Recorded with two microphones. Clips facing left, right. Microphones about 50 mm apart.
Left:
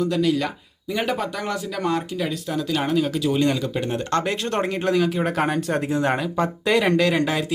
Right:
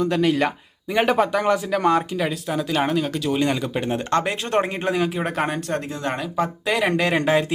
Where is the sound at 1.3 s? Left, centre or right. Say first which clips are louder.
Right 7 dB; right.